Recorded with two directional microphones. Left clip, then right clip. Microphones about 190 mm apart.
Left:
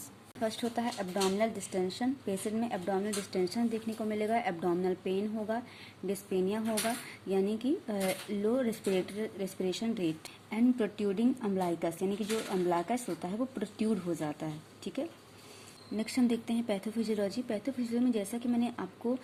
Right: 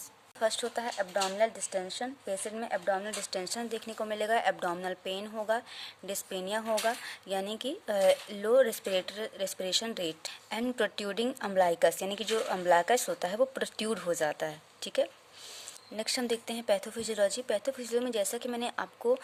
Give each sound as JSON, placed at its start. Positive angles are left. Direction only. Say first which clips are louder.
{"t": 0.3, "sound": "speech", "louder": "right 3 dB", "side_deg": -30}